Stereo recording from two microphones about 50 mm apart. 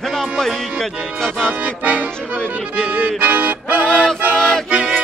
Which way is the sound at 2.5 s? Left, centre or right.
Right.